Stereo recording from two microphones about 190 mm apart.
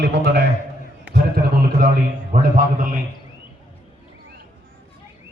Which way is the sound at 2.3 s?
45° right (ahead or behind).